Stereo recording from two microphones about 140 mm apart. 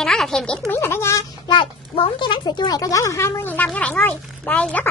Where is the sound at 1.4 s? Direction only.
35° left (ahead or behind); by 4.9 s 10° left (ahead or behind).